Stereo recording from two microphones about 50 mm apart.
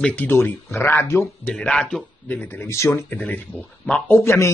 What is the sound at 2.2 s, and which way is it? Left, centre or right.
Speech, left.